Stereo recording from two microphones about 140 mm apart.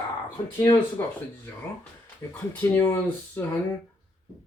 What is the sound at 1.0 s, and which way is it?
Speech, 15° left (ahead or behind).